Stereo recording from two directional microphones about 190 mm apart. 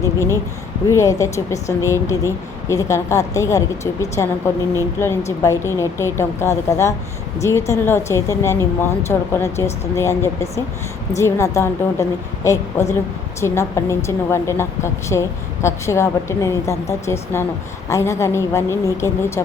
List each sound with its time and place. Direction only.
0.0 s speech: 15° left (ahead or behind)